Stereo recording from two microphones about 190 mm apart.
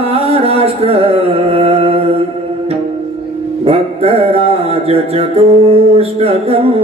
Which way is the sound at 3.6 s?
30° right (ahead or behind).